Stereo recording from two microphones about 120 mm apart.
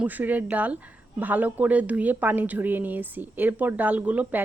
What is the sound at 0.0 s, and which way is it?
Speech, 15° right (ahead or behind).